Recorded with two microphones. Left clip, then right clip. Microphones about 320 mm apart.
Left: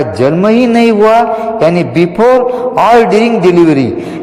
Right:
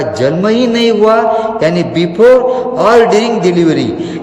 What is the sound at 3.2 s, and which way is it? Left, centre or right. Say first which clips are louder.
Speech: left 3 dB; centre.